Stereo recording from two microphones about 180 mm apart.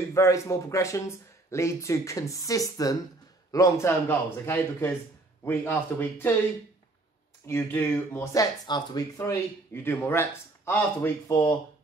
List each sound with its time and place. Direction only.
0.1 s speech: 15° left (ahead or behind)
7.4 s speech: 10° left (ahead or behind)